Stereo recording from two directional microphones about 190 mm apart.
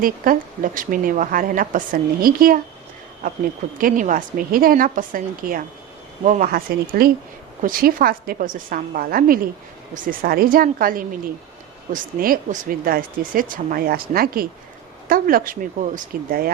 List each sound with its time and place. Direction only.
0.0 s speech: 45° right (ahead or behind)
3.8 s speech: 45° right (ahead or behind)